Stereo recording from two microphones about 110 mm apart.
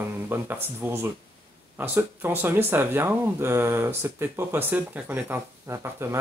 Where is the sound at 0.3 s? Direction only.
20° right (ahead or behind).